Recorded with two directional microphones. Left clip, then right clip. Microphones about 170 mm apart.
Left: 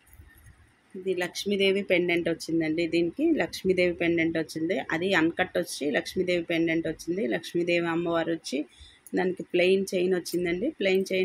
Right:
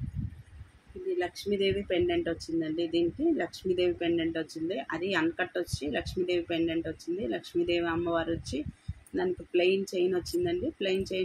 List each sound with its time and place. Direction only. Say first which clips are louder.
1.1 s speech: left 2 dB; 60° left (ahead or behind)